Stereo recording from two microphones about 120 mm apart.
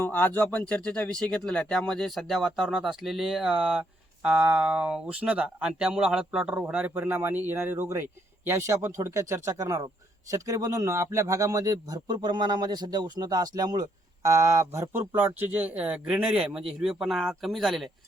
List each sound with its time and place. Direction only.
0.0 s a man's voice: 15° left (ahead or behind)